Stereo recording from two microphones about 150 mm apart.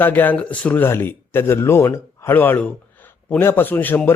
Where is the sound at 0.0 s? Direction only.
10° left (ahead or behind).